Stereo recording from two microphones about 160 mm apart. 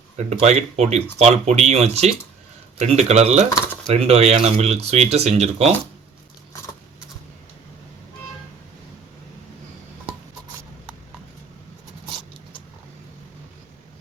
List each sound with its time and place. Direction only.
0.2 s speech: 45° right (ahead or behind)